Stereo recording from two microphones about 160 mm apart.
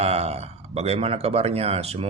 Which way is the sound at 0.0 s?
40° right (ahead or behind).